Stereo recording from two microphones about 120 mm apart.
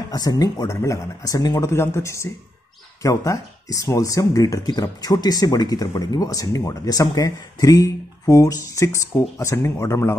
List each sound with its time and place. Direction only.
0.1 s speech: 30° left (ahead or behind)